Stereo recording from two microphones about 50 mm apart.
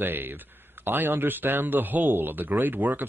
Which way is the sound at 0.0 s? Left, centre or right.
Right.